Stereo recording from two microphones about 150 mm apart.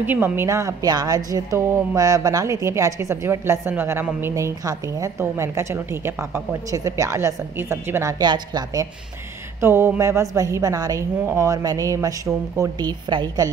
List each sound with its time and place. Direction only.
0.0 s a woman's voice: 15° right (ahead or behind)
9.6 s a woman's voice: 15° right (ahead or behind)